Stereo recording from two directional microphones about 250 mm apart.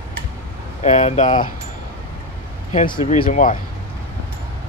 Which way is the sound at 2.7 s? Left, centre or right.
Left.